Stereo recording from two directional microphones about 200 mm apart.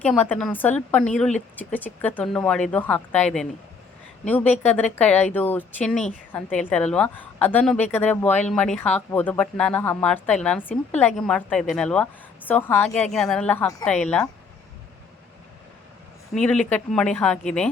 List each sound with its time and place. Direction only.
0.0 s speech: 10° left (ahead or behind)
16.3 s speech: 5° left (ahead or behind)